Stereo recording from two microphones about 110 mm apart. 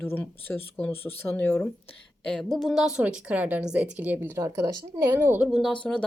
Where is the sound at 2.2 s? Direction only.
5° left (ahead or behind); by 4.4 s 15° right (ahead or behind).